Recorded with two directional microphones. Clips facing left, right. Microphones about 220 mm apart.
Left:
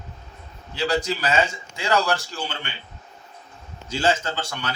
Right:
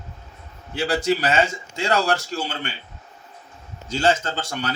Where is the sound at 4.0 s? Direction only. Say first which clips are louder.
Right 2 dB; 40° right (ahead or behind).